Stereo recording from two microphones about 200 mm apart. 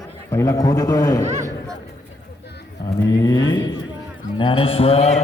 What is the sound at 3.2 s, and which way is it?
Mantra, 20° left (ahead or behind).